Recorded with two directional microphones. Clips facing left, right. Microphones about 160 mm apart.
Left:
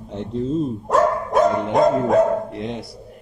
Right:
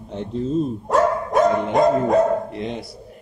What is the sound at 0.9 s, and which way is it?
Speech, centre (ahead or behind).